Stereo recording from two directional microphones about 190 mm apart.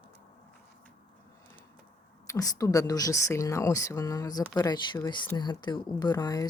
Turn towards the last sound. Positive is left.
turn(degrees=20)  # may be behind; listen again after turning